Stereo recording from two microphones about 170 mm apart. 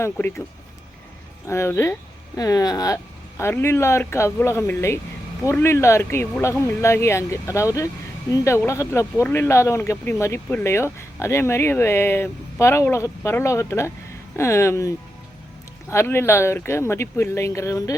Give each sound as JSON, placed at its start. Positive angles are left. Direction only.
{"t": 0.0, "sound": "speech", "side_deg": 15}
{"t": 1.5, "sound": "speech", "side_deg": 15}